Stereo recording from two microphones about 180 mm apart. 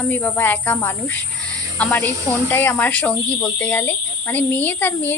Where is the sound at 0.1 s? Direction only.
10° left (ahead or behind).